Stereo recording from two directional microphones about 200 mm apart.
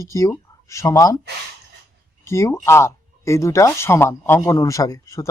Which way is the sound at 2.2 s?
15° left (ahead or behind).